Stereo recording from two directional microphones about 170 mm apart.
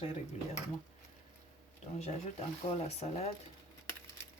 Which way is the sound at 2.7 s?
40° left (ahead or behind).